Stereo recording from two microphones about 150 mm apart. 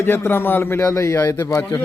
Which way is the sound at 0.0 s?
15° left (ahead or behind).